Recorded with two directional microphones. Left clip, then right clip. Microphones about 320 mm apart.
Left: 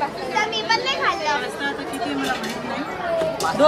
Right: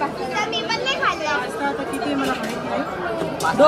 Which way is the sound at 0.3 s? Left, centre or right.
Left.